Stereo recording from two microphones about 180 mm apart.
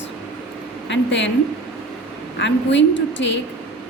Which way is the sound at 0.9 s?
90° left.